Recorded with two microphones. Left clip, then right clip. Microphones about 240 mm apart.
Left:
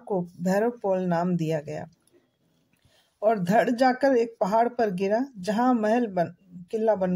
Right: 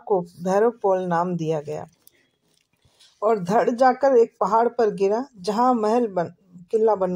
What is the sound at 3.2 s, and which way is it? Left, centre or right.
Speech, right.